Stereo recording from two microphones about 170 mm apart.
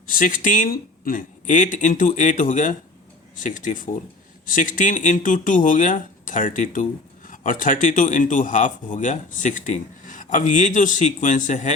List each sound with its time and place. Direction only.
0.1 s speech: 50° left (ahead or behind)